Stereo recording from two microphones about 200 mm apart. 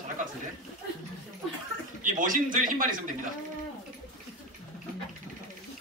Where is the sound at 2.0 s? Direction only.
40° right (ahead or behind).